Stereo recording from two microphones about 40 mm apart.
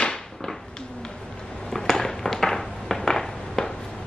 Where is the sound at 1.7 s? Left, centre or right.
Centre.